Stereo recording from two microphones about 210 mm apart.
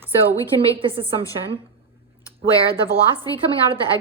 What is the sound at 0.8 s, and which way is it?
Speech, 25° right (ahead or behind).